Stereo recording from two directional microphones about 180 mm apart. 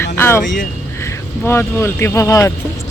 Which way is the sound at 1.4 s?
15° left (ahead or behind).